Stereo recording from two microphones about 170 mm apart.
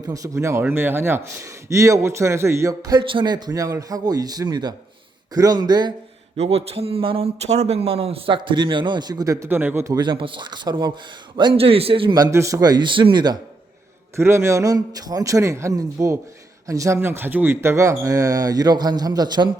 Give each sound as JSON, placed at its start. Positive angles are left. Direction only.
{"t": 0.1, "sound": "a man's voice", "side_deg": -20}
{"t": 6.3, "sound": "a man's voice", "side_deg": -35}
{"t": 14.2, "sound": "a man's voice", "side_deg": -15}